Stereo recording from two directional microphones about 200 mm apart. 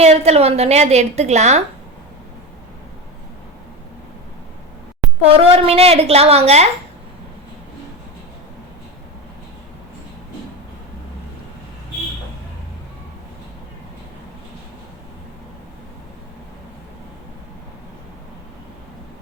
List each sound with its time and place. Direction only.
0.0 s a woman's voice: 30° right (ahead or behind)
5.3 s a woman's voice: 30° right (ahead or behind)